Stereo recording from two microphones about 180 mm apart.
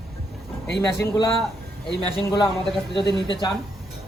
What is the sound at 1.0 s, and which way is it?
A man's voice, 20° left (ahead or behind).